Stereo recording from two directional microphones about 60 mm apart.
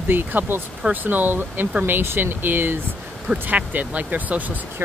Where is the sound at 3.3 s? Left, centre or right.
Right.